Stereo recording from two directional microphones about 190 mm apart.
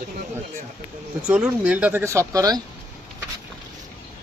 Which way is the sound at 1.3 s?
5° right (ahead or behind).